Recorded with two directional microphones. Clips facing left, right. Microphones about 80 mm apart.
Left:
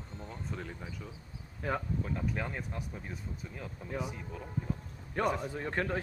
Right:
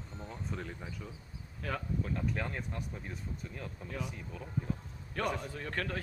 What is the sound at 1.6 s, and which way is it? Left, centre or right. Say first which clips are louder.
Speech: left 4 dB; left.